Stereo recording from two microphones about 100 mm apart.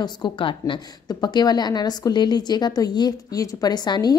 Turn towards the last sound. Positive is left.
turn(degrees=45)  # may be behind; listen again after turning